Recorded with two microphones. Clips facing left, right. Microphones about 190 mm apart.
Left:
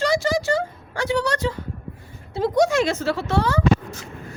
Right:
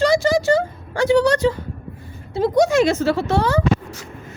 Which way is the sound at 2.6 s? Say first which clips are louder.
Right 4 dB; 5° right (ahead or behind).